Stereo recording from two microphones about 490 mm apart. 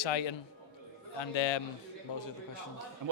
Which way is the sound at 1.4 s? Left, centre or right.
Left.